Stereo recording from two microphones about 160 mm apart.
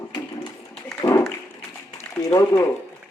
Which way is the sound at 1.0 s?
20° left (ahead or behind).